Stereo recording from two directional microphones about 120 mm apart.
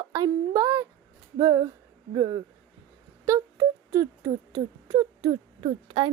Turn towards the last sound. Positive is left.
turn(degrees=-45)  # may be behind; listen again after turning